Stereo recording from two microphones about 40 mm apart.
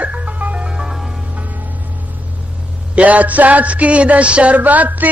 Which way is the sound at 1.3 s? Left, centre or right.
Right.